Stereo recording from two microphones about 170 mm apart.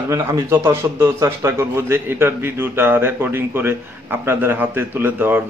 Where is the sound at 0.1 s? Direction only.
15° right (ahead or behind).